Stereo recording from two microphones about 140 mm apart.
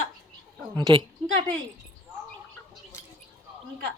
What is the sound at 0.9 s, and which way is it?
Speech, 35° right (ahead or behind).